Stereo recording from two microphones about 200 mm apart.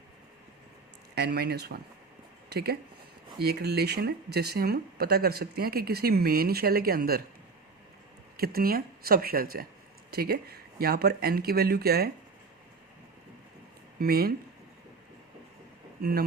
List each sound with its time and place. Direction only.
1.1 s speech: 55° right (ahead or behind)
8.4 s speech: 50° right (ahead or behind)
14.0 s speech: 50° right (ahead or behind)
16.0 s speech: 50° right (ahead or behind)